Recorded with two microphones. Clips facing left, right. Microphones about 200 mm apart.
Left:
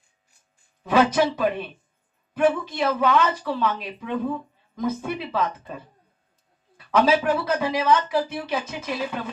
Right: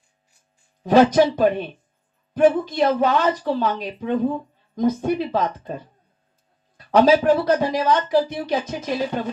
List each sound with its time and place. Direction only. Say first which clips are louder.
0.8 s speech: right 5 dB; 40° right (ahead or behind)
6.7 s speech: right 5 dB; 40° right (ahead or behind)